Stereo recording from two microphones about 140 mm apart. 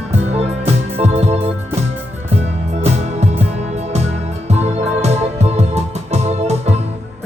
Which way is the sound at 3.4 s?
50° right (ahead or behind).